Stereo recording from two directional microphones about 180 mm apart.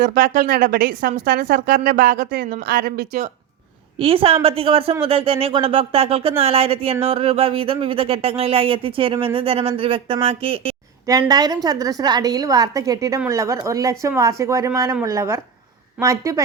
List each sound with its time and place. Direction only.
0.0 s a woman's voice: 50° right (ahead or behind)
3.9 s a woman's voice: 30° right (ahead or behind)